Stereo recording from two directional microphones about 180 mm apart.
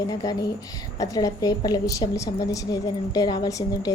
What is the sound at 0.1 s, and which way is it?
A woman's voice, 20° left (ahead or behind).